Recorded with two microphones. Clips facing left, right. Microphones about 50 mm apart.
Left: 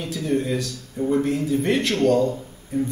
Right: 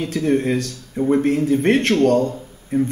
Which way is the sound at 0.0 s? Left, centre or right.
Right.